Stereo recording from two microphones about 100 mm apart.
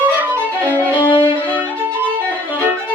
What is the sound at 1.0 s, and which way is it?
Violin, 55° left (ahead or behind).